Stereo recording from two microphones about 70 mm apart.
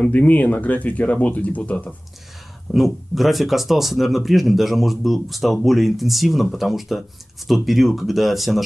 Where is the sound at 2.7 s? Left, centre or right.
Centre.